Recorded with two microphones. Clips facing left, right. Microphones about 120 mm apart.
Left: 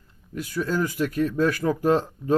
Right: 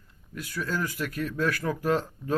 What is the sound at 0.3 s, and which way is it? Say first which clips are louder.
Speech: left 6 dB; 25° left (ahead or behind).